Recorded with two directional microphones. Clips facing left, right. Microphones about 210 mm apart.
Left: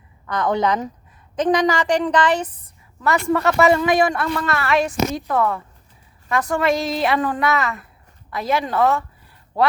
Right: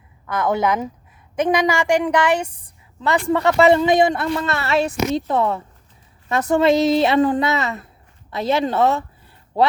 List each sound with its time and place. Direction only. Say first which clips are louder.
0.3 s a woman's voice: even; 5° right (ahead or behind); by 9.0 s 25° right (ahead or behind)